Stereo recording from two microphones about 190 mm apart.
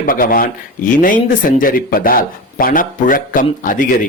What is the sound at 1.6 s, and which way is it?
Speech, 50° left (ahead or behind).